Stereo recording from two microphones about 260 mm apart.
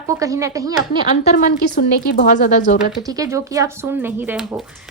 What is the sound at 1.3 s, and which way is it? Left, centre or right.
A woman's voice, left.